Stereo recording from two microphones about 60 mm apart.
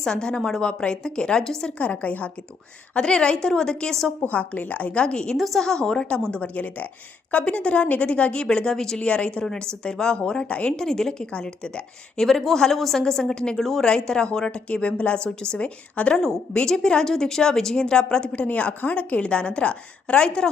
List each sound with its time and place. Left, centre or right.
0.0 s a woman's voice: centre
1.8 s a woman's voice: left
2.9 s a woman's voice: centre
4.2 s a woman's voice: left
6.3 s a woman's voice: left
16.1 s a woman's voice: centre